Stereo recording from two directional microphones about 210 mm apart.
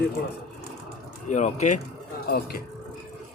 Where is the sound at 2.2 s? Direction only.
45° left (ahead or behind).